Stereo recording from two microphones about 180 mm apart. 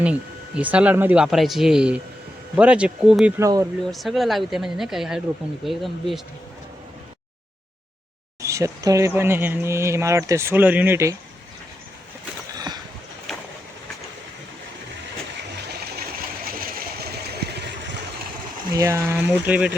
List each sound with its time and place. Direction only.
0.0 s speech: 5° right (ahead or behind)
3.3 s speech: 15° right (ahead or behind)
3.9 s speech: centre (ahead or behind)
8.4 s speech: 15° right (ahead or behind)
12.5 s a sound: 20° right (ahead or behind)
15.5 s a sound: 55° right (ahead or behind)
18.7 s speech: 20° right (ahead or behind)